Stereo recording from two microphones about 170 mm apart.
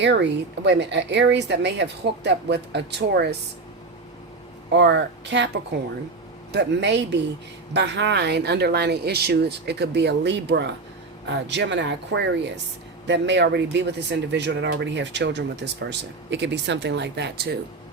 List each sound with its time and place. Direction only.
0.0 s speech: 90° right
4.7 s speech: 90° right; by 17.6 s 70° right (ahead or behind)